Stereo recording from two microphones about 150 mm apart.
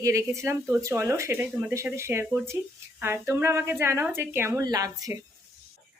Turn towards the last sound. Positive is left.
turn(degrees=-25)  # may be behind; listen again after turning